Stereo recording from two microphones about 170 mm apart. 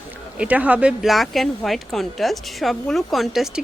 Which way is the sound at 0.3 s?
10° right (ahead or behind).